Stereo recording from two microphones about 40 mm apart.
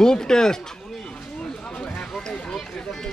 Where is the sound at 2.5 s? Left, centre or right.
Centre.